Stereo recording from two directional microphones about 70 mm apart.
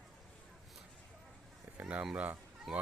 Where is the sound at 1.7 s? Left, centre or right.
Centre.